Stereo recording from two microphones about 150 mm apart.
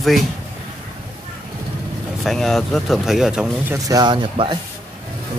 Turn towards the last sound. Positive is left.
turn(degrees=-35)  # may be behind; listen again after turning